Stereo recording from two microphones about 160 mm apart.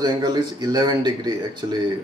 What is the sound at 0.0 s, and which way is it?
Speech, 25° right (ahead or behind).